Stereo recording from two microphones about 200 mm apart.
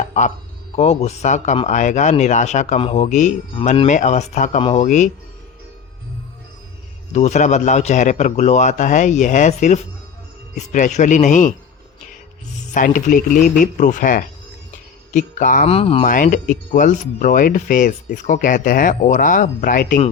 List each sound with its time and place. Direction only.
0.1 s speech: 35° left (ahead or behind)
7.1 s speech: 35° left (ahead or behind)
12.5 s speech: 40° left (ahead or behind)
16.0 s speech: 40° left (ahead or behind)